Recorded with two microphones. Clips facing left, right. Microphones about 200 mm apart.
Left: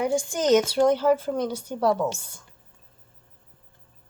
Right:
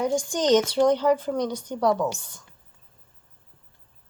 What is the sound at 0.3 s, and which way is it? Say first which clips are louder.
Speech: even; 10° left (ahead or behind).